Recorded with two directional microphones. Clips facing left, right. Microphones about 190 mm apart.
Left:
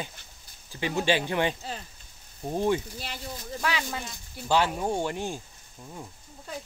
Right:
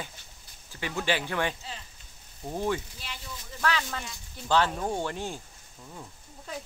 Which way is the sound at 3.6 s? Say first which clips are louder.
Right 1 dB; 15° left (ahead or behind).